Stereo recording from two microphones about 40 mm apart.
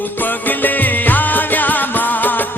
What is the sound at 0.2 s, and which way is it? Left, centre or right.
Music, left.